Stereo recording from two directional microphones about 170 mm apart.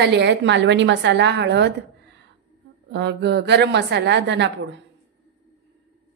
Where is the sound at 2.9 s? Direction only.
90° right.